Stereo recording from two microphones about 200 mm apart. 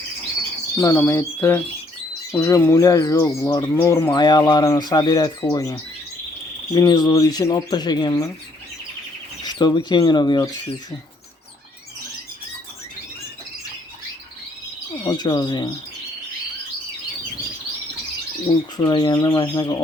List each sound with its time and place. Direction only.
0.8 s speech: 15° left (ahead or behind)
9.4 s speech: 20° left (ahead or behind)
15.0 s speech: 20° left (ahead or behind)
18.8 s speech: 20° left (ahead or behind)